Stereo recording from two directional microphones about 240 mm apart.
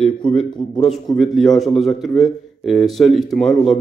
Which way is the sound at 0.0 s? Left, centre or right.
Centre.